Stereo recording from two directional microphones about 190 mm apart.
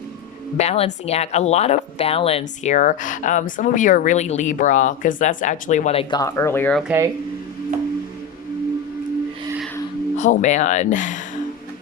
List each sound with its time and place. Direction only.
0.6 s speech: 35° left (ahead or behind); by 6.8 s 10° left (ahead or behind)
6.8 s speech: 10° right (ahead or behind)
10.2 s speech: 40° left (ahead or behind)